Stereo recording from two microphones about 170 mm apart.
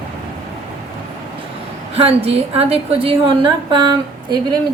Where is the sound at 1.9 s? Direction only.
35° right (ahead or behind).